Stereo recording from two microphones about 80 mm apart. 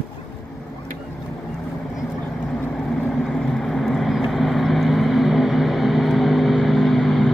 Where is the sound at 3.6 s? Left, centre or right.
Centre.